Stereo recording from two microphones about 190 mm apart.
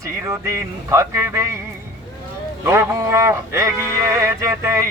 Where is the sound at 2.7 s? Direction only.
15° right (ahead or behind).